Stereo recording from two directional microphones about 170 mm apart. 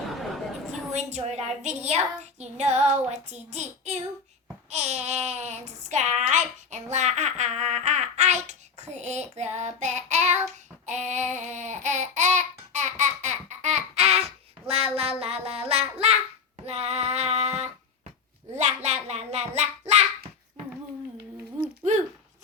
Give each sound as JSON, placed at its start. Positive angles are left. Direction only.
{"t": 0.1, "sound": "a sound", "side_deg": 0}
{"t": 0.9, "sound": "a woman's voice", "side_deg": -40}
{"t": 2.4, "sound": "child singing", "side_deg": -40}
{"t": 4.7, "sound": "a child's voice", "side_deg": -45}
{"t": 14.7, "sound": "child singing", "side_deg": -35}
{"t": 21.8, "sound": "a sound", "side_deg": -45}